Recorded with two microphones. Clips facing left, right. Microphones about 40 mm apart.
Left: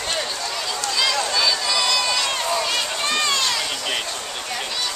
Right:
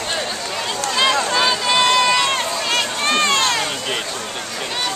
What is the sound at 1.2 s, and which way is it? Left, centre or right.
Run, right.